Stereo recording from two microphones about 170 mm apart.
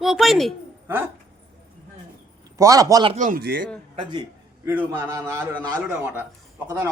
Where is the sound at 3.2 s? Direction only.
55° right (ahead or behind).